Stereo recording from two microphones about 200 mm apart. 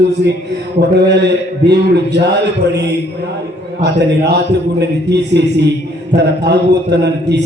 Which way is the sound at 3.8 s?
60° right (ahead or behind).